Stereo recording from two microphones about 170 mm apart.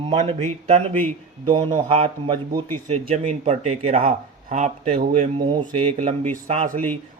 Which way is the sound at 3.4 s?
40° right (ahead or behind).